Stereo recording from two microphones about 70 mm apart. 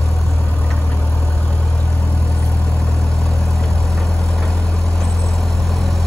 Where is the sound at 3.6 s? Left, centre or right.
Centre.